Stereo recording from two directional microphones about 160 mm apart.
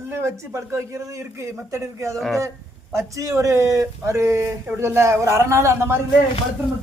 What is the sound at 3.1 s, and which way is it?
Speech, 20° right (ahead or behind).